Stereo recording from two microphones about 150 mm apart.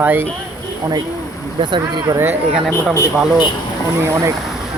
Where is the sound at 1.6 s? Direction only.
30° right (ahead or behind).